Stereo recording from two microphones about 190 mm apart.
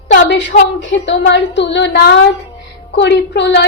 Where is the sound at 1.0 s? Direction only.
70° left (ahead or behind).